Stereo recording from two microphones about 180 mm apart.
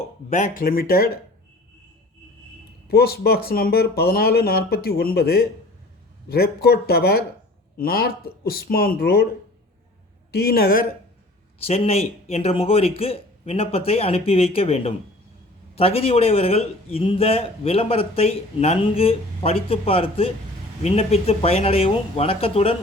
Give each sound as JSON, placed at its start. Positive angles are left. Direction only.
{"t": 0.3, "sound": "speech", "side_deg": 45}
{"t": 2.9, "sound": "speech", "side_deg": 60}
{"t": 10.3, "sound": "speech", "side_deg": 60}
{"t": 11.6, "sound": "a man's voice", "side_deg": 35}